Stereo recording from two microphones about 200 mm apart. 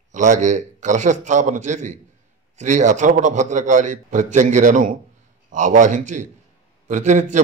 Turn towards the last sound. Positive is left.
turn(degrees=-35)  # may be behind; listen again after turning